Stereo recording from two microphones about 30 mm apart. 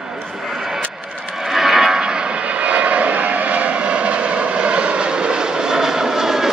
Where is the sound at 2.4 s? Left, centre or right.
Right.